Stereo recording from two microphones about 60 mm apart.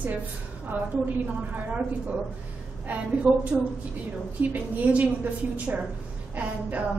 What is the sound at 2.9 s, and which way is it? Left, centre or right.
A woman's voice, right.